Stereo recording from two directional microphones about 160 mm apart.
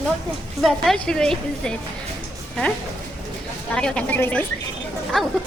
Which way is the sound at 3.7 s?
5° left (ahead or behind).